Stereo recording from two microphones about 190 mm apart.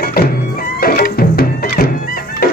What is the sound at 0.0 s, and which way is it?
Music, 50° left (ahead or behind).